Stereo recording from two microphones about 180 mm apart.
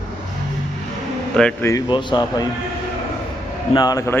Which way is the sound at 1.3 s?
5° left (ahead or behind).